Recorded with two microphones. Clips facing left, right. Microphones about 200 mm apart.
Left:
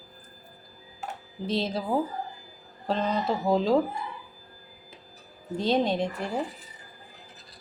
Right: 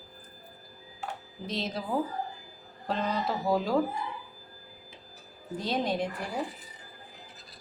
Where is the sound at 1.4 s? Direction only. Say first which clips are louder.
Left 6 dB; 30° left (ahead or behind).